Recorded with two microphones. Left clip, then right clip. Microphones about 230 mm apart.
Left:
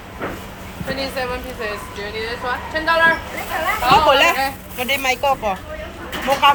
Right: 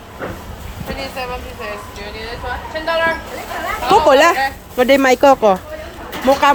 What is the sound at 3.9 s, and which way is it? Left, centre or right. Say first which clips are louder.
A woman's voice: right 3 dB; right.